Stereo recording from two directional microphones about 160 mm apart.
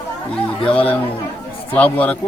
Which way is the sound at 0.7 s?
35° left (ahead or behind).